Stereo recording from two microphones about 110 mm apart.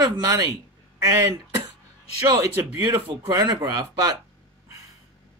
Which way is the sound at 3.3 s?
40° right (ahead or behind).